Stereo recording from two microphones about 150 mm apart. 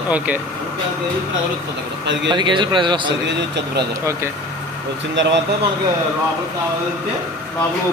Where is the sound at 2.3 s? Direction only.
30° right (ahead or behind).